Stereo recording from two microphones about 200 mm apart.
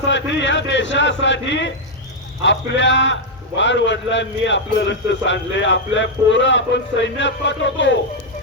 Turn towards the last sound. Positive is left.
turn(degrees=65)  # may be behind; listen again after turning